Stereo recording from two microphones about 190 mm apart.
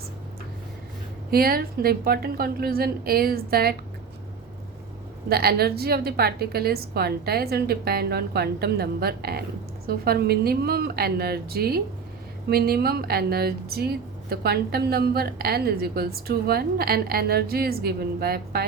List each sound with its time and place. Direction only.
1.3 s speech: 50° right (ahead or behind)
5.3 s a woman's voice: 55° right (ahead or behind)